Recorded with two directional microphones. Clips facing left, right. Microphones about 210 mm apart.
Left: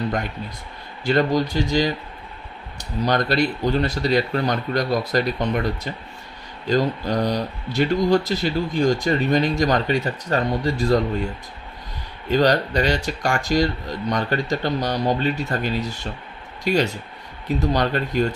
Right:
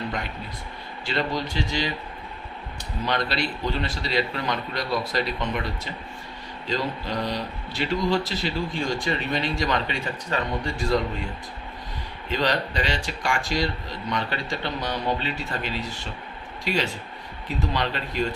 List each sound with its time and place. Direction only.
1.0 s speech: 45° left (ahead or behind)
12.3 s speech: 40° left (ahead or behind)